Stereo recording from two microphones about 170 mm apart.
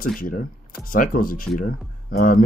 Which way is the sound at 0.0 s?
55° left (ahead or behind).